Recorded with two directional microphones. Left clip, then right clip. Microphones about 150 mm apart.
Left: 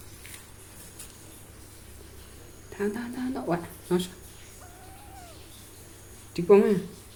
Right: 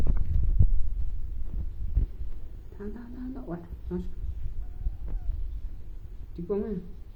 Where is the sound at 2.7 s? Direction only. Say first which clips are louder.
Left 11 dB; 70° left (ahead or behind).